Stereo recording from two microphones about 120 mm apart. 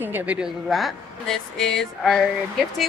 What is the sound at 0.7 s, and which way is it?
Speech, centre (ahead or behind).